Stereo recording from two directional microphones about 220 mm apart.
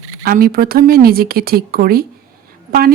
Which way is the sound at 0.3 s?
40° right (ahead or behind).